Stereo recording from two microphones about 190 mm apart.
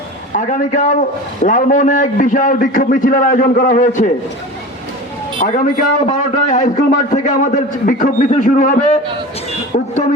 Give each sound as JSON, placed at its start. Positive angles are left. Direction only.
{"t": 0.3, "sound": "a man's voice", "side_deg": 45}
{"t": 5.4, "sound": "a man's voice", "side_deg": 40}
{"t": 9.7, "sound": "a sound", "side_deg": 40}